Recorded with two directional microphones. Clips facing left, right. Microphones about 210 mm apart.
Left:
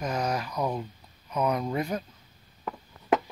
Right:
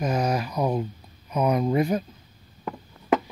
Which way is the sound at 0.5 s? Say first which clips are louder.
Right 5 dB; 25° right (ahead or behind).